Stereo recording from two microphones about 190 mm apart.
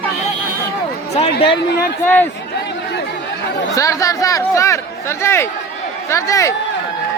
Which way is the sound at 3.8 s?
15° left (ahead or behind).